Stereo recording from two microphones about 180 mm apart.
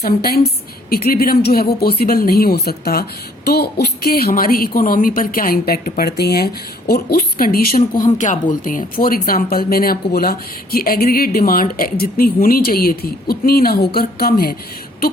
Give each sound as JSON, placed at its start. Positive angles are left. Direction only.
{"t": 0.0, "sound": "speech", "side_deg": 55}